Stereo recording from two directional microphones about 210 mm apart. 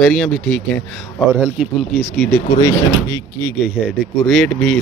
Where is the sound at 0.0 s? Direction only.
5° left (ahead or behind).